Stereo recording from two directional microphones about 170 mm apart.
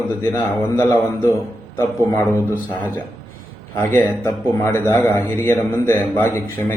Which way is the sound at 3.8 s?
15° left (ahead or behind).